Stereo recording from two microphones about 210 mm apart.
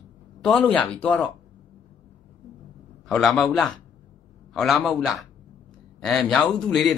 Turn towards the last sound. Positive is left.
turn(degrees=0)  # may be behind; listen again after turning